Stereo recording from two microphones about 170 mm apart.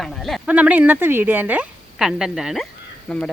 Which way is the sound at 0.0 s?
Centre (ahead or behind).